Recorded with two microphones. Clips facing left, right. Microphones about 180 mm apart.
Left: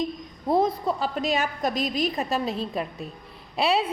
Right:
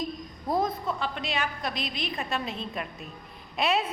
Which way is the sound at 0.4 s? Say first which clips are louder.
Left 5 dB; 30° left (ahead or behind).